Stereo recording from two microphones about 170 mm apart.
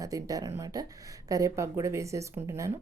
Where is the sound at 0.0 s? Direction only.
20° right (ahead or behind).